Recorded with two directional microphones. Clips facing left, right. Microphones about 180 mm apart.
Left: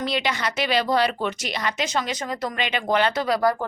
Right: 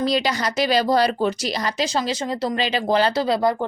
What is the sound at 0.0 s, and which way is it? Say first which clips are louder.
Speech: right 4 dB; 35° right (ahead or behind).